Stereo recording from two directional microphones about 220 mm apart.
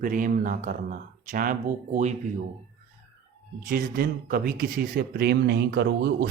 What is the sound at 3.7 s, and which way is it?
Speech, 45° right (ahead or behind).